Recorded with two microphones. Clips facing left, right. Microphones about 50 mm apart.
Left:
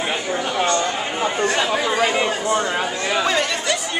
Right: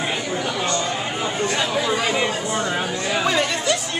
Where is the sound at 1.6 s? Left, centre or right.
Left.